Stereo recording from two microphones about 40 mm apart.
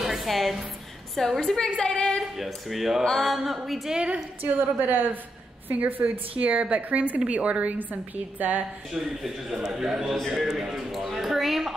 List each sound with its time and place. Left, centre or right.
0.0 s a sound: centre
1.1 s a woman's voice: centre
2.3 s a man's voice: centre
3.0 s a woman's voice: centre
3.3 s a man's voice: centre
4.4 s a woman's voice: right
9.2 s a man's voice: centre